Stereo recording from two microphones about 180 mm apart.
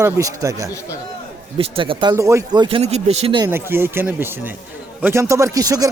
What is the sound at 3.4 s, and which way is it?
Speech, 15° right (ahead or behind).